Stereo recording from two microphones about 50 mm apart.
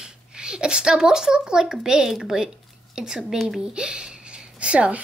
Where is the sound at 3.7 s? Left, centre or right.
Centre.